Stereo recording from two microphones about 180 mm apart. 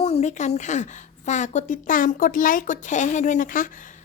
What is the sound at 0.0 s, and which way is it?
A woman's voice, 35° left (ahead or behind).